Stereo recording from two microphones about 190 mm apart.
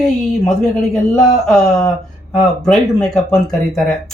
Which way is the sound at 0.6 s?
5° left (ahead or behind).